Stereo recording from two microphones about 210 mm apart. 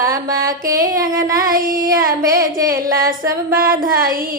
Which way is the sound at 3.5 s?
45° right (ahead or behind).